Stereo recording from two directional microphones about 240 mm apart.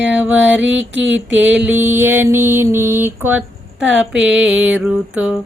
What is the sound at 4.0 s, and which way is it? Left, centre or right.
Mantra, centre.